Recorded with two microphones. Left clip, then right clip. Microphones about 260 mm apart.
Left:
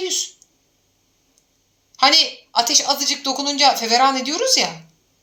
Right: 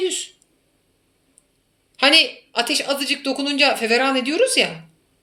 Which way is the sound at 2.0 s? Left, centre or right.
Left.